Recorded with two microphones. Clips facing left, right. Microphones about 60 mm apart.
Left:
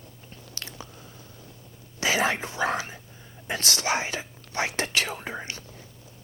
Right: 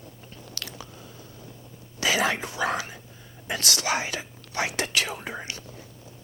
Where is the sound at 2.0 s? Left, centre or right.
Left.